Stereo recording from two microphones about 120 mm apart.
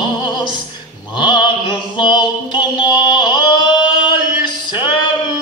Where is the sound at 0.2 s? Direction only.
40° left (ahead or behind).